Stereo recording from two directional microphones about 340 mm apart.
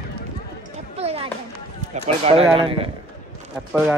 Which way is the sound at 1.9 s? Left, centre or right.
Centre.